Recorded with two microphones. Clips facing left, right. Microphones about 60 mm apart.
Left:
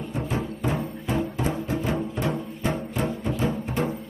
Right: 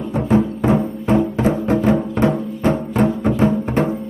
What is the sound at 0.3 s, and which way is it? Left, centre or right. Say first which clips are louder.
Music: right 14 dB; right.